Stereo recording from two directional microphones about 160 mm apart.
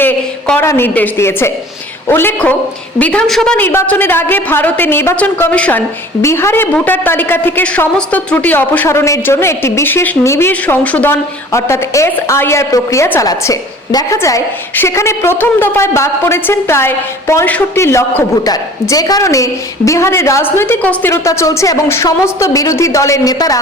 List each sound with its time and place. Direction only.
0.0 s a woman's voice: 10° left (ahead or behind)